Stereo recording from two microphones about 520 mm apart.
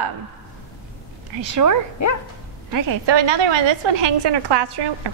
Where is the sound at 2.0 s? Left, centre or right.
Left.